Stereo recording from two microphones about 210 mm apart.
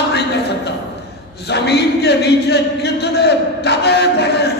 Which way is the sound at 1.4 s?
55° left (ahead or behind).